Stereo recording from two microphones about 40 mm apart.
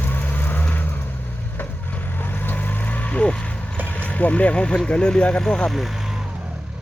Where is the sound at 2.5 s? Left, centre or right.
Left.